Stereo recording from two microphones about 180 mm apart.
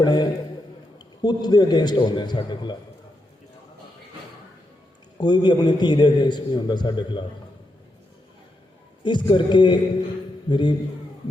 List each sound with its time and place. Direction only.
0.0 s a sound: 25° left (ahead or behind)
0.9 s a man's voice: 25° left (ahead or behind)
5.1 s a man's voice: 25° left (ahead or behind)
9.0 s a man's voice: 25° left (ahead or behind)